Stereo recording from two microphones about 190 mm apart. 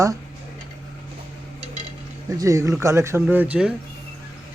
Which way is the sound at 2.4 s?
15° right (ahead or behind).